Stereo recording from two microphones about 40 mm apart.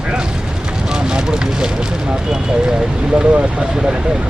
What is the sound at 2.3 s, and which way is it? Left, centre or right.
Speech, centre.